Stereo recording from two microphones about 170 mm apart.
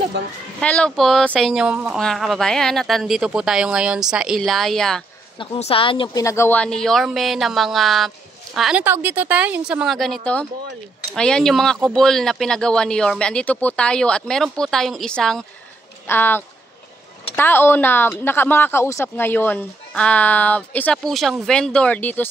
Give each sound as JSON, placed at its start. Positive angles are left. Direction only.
{"t": 0.6, "sound": "speech", "side_deg": 5}
{"t": 5.4, "sound": "speech", "side_deg": 30}
{"t": 6.2, "sound": "a woman's voice", "side_deg": 15}